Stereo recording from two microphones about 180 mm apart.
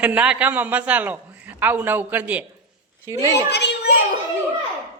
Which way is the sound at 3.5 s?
70° left (ahead or behind).